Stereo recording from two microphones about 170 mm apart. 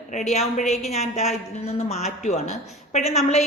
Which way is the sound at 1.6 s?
40° left (ahead or behind).